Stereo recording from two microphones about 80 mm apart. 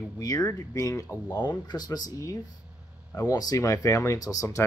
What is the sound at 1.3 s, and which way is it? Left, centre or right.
Speech, left.